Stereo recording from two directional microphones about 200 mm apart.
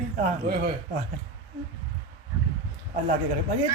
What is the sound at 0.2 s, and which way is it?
Speech, 50° right (ahead or behind).